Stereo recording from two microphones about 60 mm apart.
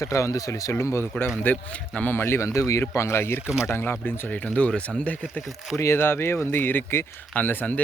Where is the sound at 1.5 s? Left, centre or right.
Left.